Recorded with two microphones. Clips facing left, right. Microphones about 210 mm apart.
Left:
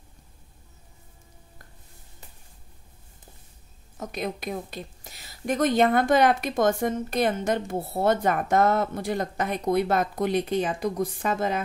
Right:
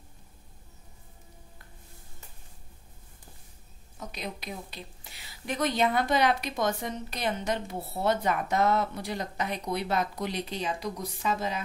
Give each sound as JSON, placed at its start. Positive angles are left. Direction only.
{"t": 4.0, "sound": "a woman's voice", "side_deg": 50}